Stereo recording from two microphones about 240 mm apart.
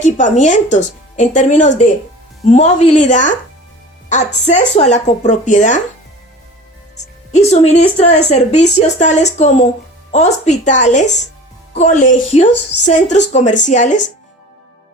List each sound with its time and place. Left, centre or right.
0.0 s a woman's voice: left
4.4 s a woman's voice: left
6.9 s a woman's voice: left